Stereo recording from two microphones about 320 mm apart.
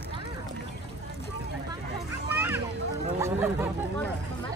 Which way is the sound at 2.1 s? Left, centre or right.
Centre.